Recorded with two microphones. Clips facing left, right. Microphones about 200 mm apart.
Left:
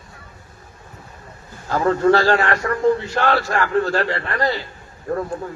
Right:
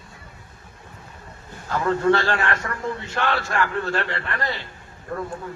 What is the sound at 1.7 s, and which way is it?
A man's voice, 35° left (ahead or behind).